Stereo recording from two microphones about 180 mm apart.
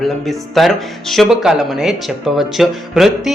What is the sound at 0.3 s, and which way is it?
Speech, centre (ahead or behind).